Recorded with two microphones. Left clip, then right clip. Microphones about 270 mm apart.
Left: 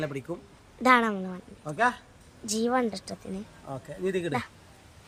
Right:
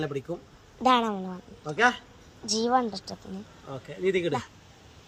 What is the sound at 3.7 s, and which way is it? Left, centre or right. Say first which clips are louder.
Speech: right 4 dB; left.